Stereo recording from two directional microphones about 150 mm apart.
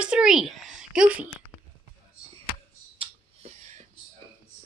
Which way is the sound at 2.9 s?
35° right (ahead or behind).